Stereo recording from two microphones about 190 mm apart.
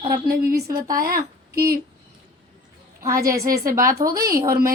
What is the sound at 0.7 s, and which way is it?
Speech, 20° right (ahead or behind).